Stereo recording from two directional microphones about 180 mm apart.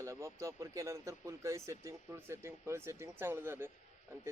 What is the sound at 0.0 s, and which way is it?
Speech, 15° right (ahead or behind).